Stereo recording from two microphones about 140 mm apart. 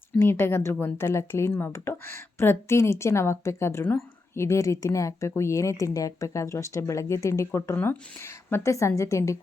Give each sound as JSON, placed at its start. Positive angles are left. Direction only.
{"t": 0.2, "sound": "a woman's voice", "side_deg": 15}